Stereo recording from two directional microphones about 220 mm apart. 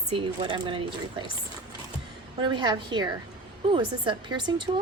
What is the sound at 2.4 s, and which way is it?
A woman's voice, 20° right (ahead or behind).